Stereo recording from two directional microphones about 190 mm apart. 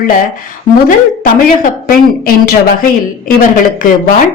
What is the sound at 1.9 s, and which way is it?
Speech, 50° left (ahead or behind).